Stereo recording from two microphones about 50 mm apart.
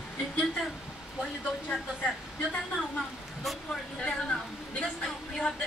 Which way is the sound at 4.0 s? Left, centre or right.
Left.